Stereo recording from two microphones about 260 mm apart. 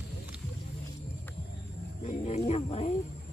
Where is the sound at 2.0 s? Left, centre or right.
Left.